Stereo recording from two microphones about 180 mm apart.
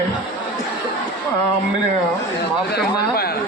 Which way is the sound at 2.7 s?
60° left (ahead or behind).